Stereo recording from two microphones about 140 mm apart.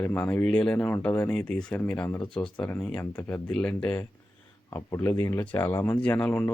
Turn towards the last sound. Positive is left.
turn(degrees=10)  # may be behind; listen again after turning